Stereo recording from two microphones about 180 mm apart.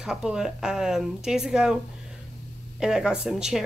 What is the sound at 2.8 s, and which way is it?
Speech, 5° right (ahead or behind).